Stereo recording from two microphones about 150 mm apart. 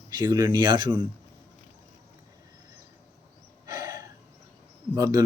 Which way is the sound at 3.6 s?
20° right (ahead or behind).